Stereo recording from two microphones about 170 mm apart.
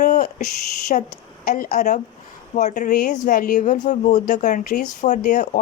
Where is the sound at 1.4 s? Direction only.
55° left (ahead or behind).